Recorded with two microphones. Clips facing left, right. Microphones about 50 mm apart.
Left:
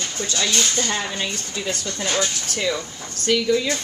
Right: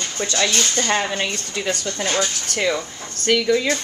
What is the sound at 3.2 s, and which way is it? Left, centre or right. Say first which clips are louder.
Speech: right 2 dB; right.